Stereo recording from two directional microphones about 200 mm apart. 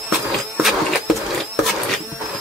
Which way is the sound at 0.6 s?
Centre (ahead or behind).